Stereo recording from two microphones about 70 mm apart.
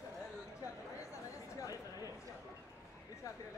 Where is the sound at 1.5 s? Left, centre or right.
Left.